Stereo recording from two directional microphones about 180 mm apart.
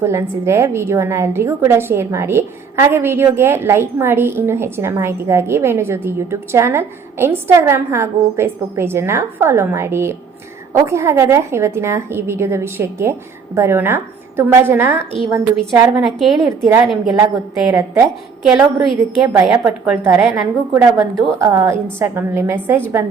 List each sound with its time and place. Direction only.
0.0 s a woman's voice: 15° right (ahead or behind)
16.0 s a woman's voice: centre (ahead or behind)
16.5 s a woman's voice: 15° right (ahead or behind)
18.5 s a woman's voice: centre (ahead or behind)